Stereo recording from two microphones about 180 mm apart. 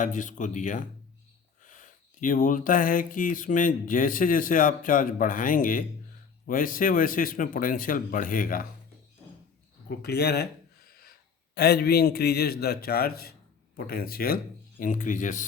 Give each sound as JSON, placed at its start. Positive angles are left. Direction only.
{"t": 0.0, "sound": "speech", "side_deg": 45}
{"t": 10.0, "sound": "a sound", "side_deg": 65}
{"t": 11.5, "sound": "a man's voice", "side_deg": 65}